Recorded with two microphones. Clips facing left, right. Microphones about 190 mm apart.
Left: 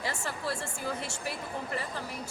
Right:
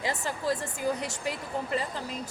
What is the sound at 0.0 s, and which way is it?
A woman's voice, 15° right (ahead or behind).